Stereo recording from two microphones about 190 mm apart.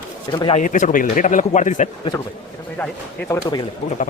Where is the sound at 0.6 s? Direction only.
45° left (ahead or behind).